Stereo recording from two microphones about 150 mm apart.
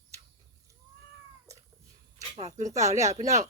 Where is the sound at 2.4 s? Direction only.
50° right (ahead or behind).